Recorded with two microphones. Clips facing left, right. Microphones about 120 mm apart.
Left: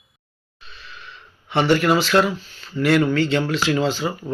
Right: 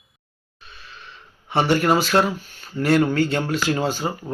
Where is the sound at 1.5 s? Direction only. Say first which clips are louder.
Left 1 dB; 45° right (ahead or behind).